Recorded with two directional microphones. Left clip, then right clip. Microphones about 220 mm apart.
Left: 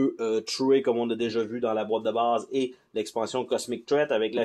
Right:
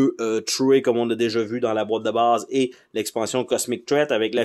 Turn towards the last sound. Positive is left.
turn(degrees=-40)  # may be behind; listen again after turning